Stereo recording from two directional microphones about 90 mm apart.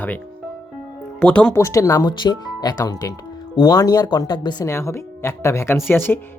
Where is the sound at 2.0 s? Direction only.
50° left (ahead or behind).